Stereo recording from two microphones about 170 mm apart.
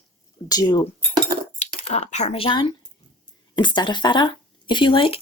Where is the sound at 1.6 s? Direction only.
40° left (ahead or behind).